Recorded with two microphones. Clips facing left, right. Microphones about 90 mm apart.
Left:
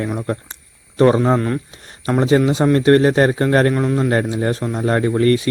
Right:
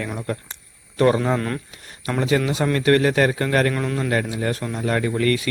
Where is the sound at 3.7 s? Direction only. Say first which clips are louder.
Left 6 dB; 15° left (ahead or behind).